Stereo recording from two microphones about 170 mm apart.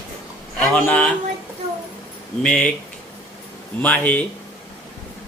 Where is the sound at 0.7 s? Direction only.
5° left (ahead or behind).